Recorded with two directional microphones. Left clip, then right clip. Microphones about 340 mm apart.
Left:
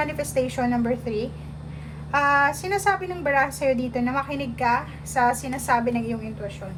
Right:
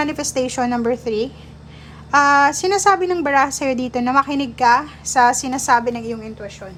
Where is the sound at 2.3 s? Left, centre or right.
Centre.